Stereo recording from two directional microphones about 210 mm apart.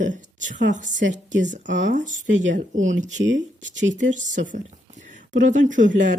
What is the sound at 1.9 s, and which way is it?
Speech, 35° right (ahead or behind).